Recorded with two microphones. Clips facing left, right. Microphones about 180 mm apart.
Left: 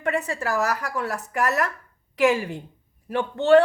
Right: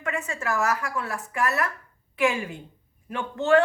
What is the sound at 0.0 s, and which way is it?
A man's voice, 35° left (ahead or behind).